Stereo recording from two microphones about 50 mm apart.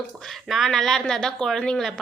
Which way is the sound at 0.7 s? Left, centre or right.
Centre.